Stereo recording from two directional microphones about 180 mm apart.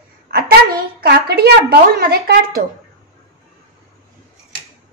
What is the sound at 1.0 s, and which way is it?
A woman's voice, 65° right (ahead or behind).